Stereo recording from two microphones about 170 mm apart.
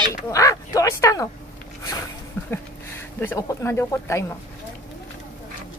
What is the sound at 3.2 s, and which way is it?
Speech, 15° left (ahead or behind).